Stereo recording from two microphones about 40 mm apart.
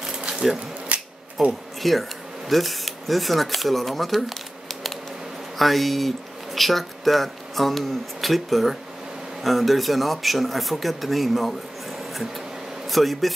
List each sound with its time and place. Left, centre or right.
0.0 s a sound: right
0.8 s camera: right
1.8 s speech: centre
5.6 s speech: centre
12.9 s speech: centre